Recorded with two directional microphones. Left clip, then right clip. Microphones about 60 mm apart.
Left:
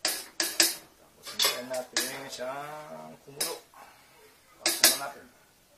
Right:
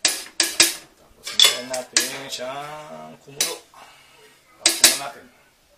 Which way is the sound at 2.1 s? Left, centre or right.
Centre.